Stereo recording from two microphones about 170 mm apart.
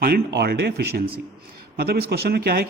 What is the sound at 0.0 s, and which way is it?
A man's voice, 65° right (ahead or behind).